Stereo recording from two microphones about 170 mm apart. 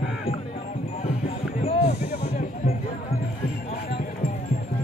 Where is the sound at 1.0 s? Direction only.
40° left (ahead or behind).